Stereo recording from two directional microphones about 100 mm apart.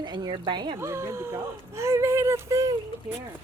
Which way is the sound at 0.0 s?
50° right (ahead or behind).